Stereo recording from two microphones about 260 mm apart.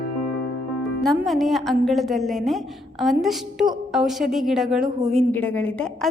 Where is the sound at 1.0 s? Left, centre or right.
Centre.